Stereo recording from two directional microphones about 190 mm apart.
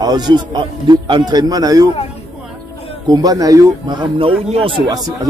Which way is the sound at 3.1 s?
20° right (ahead or behind).